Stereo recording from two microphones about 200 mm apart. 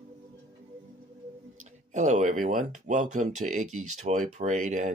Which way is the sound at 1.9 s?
40° right (ahead or behind).